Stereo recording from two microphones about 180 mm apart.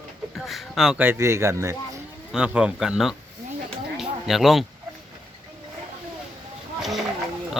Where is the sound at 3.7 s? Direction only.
Centre (ahead or behind).